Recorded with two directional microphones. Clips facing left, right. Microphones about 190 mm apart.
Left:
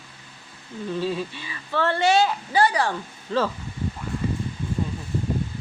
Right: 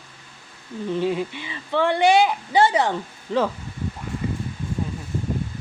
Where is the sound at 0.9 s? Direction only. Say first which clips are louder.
Right 3 dB; 20° right (ahead or behind).